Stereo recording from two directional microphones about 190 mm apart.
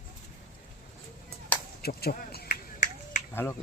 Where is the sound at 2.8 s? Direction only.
40° left (ahead or behind).